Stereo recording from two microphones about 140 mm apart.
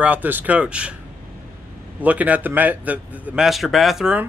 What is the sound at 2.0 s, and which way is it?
A man's voice, 10° right (ahead or behind).